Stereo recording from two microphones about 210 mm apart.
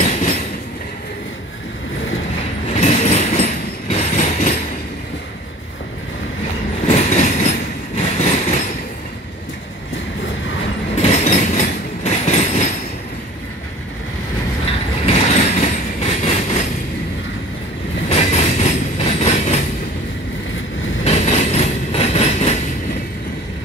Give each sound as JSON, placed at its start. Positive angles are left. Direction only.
{"t": 0.0, "sound": "train", "side_deg": 40}
{"t": 2.8, "sound": "train", "side_deg": 30}
{"t": 6.9, "sound": "train", "side_deg": 35}
{"t": 11.0, "sound": "train", "side_deg": 30}
{"t": 15.0, "sound": "train", "side_deg": 30}
{"t": 18.1, "sound": "train", "side_deg": 30}
{"t": 21.0, "sound": "train", "side_deg": 30}